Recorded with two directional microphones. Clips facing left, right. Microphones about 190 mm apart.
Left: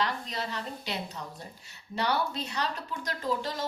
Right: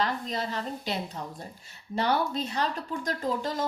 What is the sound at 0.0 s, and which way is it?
Speech, 45° right (ahead or behind).